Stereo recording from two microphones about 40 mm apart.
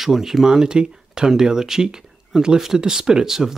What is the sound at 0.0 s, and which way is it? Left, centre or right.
Speech, centre.